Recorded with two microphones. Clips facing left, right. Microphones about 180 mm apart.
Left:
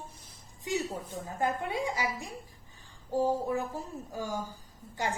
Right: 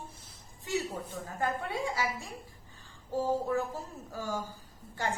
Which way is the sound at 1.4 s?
15° left (ahead or behind).